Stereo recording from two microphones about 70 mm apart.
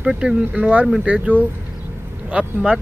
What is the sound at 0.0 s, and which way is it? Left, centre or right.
Speech, centre.